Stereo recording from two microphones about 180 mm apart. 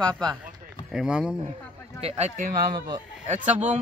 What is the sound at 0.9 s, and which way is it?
Speech, 5° right (ahead or behind).